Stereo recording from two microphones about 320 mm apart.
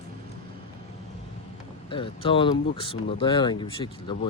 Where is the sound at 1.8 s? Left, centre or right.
Centre.